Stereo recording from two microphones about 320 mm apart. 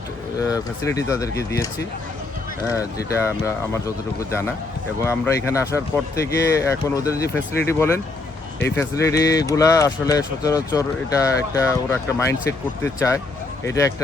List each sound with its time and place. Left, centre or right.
0.4 s speech: centre
3.1 s speech: centre